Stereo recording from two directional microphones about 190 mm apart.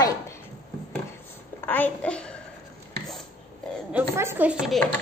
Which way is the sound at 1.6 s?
10° left (ahead or behind).